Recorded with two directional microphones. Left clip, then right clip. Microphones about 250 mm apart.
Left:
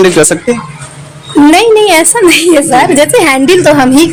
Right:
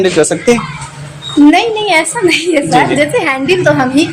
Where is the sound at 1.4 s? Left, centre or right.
Left.